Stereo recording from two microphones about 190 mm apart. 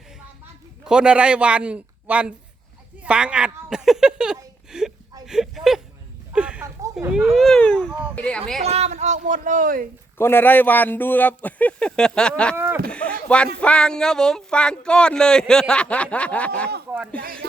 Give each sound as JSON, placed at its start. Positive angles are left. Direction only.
{"t": 0.9, "sound": "a man's voice", "side_deg": -5}
{"t": 4.7, "sound": "whimper", "side_deg": -5}
{"t": 5.2, "sound": "a sound", "side_deg": 0}
{"t": 7.0, "sound": "a man's voice", "side_deg": -5}
{"t": 8.6, "sound": "speech", "side_deg": -35}
{"t": 10.2, "sound": "speech", "side_deg": 10}
{"t": 12.5, "sound": "speech", "side_deg": -10}
{"t": 12.9, "sound": "a man's voice", "side_deg": 5}